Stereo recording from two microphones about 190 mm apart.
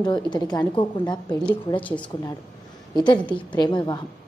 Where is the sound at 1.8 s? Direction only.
10° left (ahead or behind).